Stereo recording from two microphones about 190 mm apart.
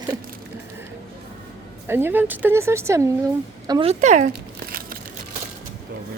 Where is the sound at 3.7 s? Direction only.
25° right (ahead or behind).